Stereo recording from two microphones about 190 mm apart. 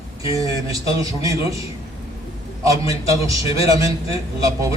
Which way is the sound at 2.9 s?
15° right (ahead or behind).